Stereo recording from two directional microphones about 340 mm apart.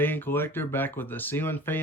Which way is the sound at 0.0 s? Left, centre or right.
Centre.